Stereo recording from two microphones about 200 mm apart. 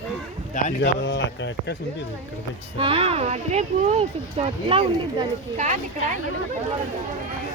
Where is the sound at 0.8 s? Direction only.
60° left (ahead or behind).